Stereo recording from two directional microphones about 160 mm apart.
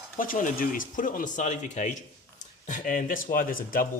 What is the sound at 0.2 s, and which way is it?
Speech, 55° left (ahead or behind).